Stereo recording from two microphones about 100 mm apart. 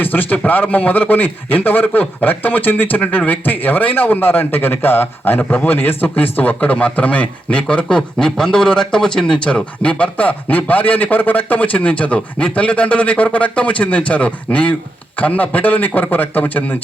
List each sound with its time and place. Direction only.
0.0 s a man's voice: 20° left (ahead or behind)